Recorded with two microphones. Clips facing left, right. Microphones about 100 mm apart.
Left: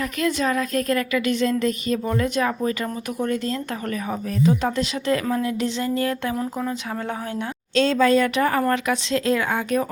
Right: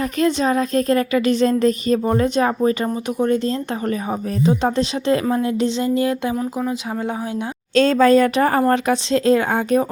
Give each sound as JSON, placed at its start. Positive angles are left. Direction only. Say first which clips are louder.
{"t": 0.0, "sound": "a woman's voice", "louder": "right 4 dB", "side_deg": -30}
{"t": 7.8, "sound": "speech", "louder": "right 5 dB", "side_deg": -45}